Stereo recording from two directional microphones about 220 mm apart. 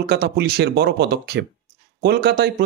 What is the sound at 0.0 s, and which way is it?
Speech, 45° right (ahead or behind).